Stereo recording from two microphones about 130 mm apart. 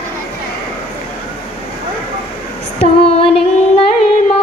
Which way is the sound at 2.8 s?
50° left (ahead or behind).